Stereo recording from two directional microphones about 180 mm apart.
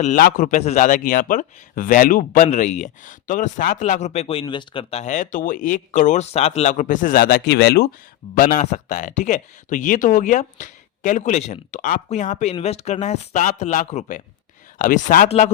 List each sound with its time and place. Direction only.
0.0 s a man's voice: 45° left (ahead or behind); by 7.9 s 65° left (ahead or behind)
8.4 s a man's voice: 50° left (ahead or behind)